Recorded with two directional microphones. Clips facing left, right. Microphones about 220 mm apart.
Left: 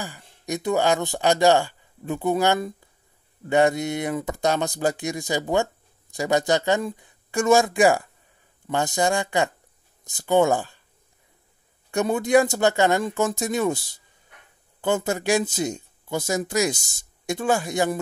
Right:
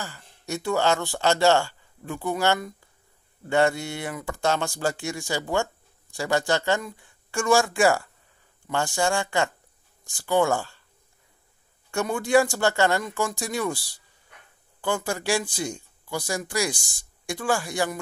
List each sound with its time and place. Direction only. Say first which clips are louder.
0.0 s speech: left 3 dB; 15° left (ahead or behind)
11.9 s speech: left 2 dB; 20° left (ahead or behind)